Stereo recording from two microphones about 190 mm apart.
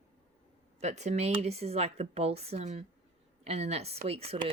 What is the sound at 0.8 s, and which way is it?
Speech, 35° right (ahead or behind).